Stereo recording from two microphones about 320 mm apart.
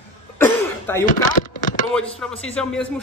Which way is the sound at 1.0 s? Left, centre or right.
Left.